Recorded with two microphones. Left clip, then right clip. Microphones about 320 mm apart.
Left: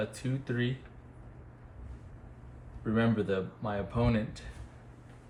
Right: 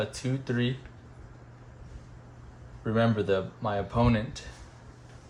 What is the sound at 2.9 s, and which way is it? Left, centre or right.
Speech, right.